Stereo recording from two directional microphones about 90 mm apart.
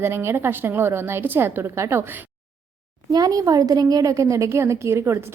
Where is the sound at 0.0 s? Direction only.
30° right (ahead or behind).